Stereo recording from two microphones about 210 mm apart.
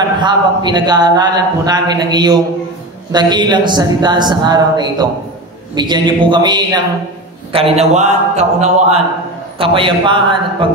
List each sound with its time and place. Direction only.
0.2 s a man's voice: 20° right (ahead or behind)